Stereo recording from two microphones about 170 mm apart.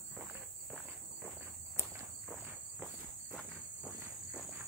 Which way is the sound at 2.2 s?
5° right (ahead or behind).